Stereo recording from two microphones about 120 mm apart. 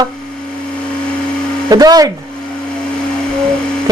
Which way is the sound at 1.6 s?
35° right (ahead or behind).